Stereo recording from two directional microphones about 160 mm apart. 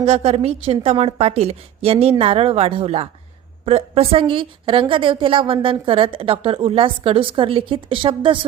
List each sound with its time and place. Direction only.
0.0 s a woman's voice: 40° right (ahead or behind)